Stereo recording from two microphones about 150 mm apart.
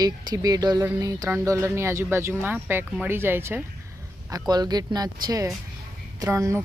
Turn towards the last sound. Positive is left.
turn(degrees=-20)  # may be behind; listen again after turning